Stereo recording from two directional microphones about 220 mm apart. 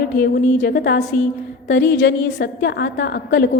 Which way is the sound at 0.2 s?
45° left (ahead or behind).